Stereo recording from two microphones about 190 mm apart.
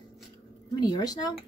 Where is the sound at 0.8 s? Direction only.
20° left (ahead or behind).